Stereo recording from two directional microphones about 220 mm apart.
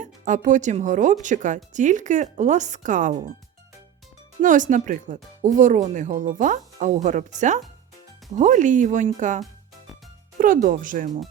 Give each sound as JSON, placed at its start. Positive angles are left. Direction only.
{"t": 0.0, "sound": "speech", "side_deg": -35}
{"t": 4.4, "sound": "speech", "side_deg": -35}